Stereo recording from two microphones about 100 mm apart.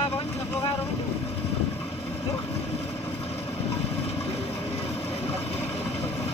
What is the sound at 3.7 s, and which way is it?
Vehicle, 90° left.